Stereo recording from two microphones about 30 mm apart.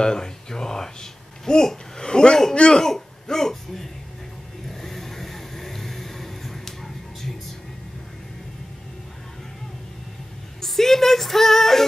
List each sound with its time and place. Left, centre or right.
0.0 s a man's voice: left
2.8 s speech: centre
4.6 s vehicle: centre
10.6 s music: centre